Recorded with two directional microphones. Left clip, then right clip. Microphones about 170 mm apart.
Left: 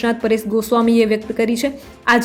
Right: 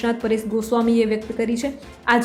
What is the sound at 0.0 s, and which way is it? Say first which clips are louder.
A woman's voice: left 4 dB; 15° left (ahead or behind).